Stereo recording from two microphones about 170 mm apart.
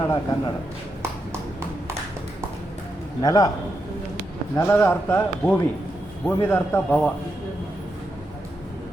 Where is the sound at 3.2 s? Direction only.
20° left (ahead or behind).